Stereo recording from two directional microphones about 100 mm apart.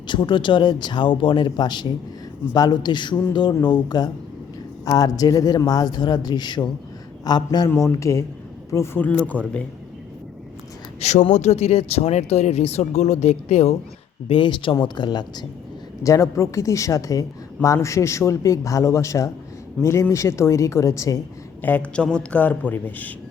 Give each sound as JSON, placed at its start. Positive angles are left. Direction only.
{"t": 0.1, "sound": "speech", "side_deg": 50}
{"t": 7.9, "sound": "speech", "side_deg": 30}
{"t": 9.0, "sound": "a man's voice", "side_deg": 15}
{"t": 11.0, "sound": "speech", "side_deg": 90}
{"t": 14.3, "sound": "speech", "side_deg": 60}
{"t": 16.0, "sound": "a woman's voice", "side_deg": 35}
{"t": 21.6, "sound": "a man's voice", "side_deg": 15}